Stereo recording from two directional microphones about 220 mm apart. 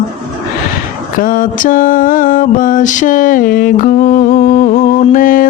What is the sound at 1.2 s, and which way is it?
Mantra, 40° left (ahead or behind).